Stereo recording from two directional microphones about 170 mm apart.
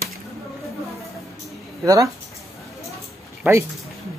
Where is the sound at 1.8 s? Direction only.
20° right (ahead or behind).